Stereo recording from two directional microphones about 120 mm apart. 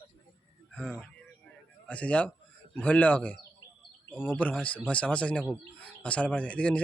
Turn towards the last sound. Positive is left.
turn(degrees=10)  # may be behind; listen again after turning